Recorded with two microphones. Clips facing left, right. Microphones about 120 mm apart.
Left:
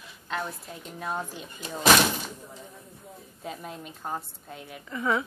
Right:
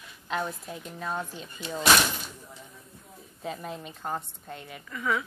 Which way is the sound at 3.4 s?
Centre (ahead or behind).